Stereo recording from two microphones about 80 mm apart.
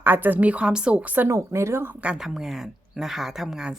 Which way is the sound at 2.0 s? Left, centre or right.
Centre.